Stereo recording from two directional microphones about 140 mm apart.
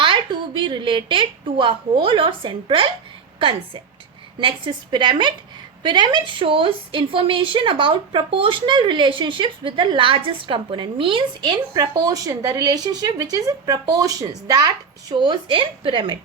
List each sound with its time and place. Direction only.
0.0 s a woman's voice: 35° right (ahead or behind)